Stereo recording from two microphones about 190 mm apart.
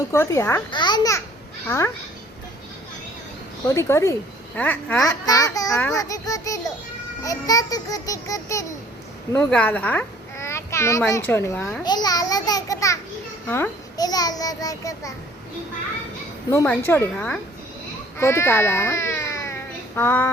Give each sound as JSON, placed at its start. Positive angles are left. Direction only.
{"t": 0.1, "sound": "a child's voice", "side_deg": 15}
{"t": 3.8, "sound": "a child's voice", "side_deg": 15}
{"t": 11.8, "sound": "a sound", "side_deg": 20}
{"t": 13.5, "sound": "a child's voice", "side_deg": 15}
{"t": 16.5, "sound": "a child's voice", "side_deg": 15}